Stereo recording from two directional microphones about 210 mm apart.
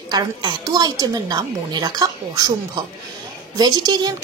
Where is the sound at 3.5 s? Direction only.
20° right (ahead or behind).